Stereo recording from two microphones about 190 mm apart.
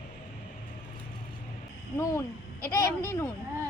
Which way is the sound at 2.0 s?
15° left (ahead or behind).